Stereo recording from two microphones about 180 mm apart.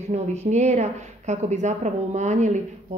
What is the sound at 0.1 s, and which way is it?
A woman's voice, 40° right (ahead or behind).